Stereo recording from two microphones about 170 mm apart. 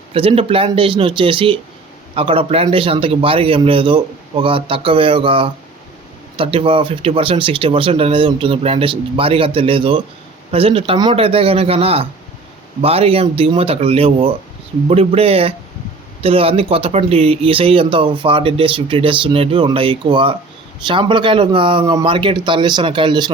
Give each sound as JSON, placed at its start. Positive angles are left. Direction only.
{"t": 0.1, "sound": "speech", "side_deg": -35}